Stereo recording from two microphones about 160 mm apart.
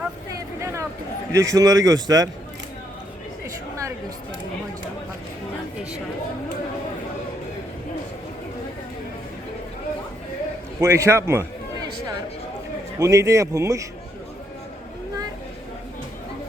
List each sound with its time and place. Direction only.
0.6 s a sound: 20° right (ahead or behind)
1.3 s a man's voice: 20° right (ahead or behind)
10.8 s a man's voice: 20° right (ahead or behind)
13.0 s a man's voice: 20° right (ahead or behind)